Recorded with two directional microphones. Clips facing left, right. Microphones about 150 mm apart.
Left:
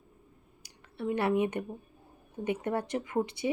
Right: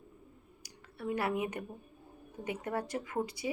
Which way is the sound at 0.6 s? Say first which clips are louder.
Left 5 dB; 25° left (ahead or behind).